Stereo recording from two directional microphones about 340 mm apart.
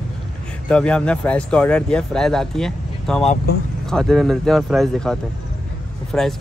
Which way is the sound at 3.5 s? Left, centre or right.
Left.